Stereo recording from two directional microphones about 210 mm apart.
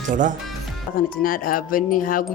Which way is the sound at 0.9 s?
40° left (ahead or behind).